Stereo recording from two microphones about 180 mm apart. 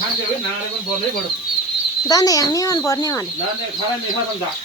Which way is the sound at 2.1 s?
20° left (ahead or behind).